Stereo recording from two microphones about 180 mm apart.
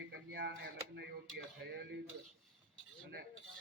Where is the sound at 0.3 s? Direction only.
65° right (ahead or behind).